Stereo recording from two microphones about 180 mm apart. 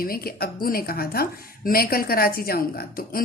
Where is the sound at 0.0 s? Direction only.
55° left (ahead or behind).